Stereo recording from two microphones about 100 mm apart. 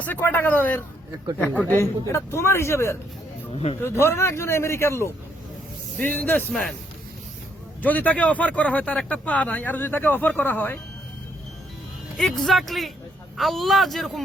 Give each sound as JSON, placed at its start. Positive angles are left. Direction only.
{"t": 0.0, "sound": "a man's voice", "side_deg": 20}
{"t": 3.5, "sound": "speech", "side_deg": 80}
{"t": 3.8, "sound": "a man's voice", "side_deg": 25}
{"t": 6.5, "sound": "speech", "side_deg": 5}
{"t": 7.8, "sound": "speech", "side_deg": 15}
{"t": 12.1, "sound": "speech", "side_deg": 5}